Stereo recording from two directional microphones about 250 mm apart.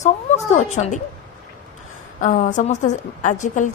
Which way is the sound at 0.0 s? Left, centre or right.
Left.